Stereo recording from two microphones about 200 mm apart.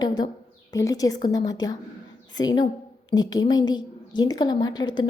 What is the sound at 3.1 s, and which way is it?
A woman's voice, 20° left (ahead or behind).